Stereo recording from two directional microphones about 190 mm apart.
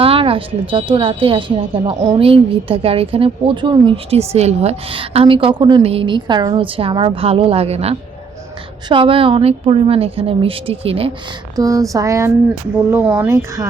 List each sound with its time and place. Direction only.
0.0 s a woman's voice: 30° right (ahead or behind)
11.5 s speech: 20° right (ahead or behind)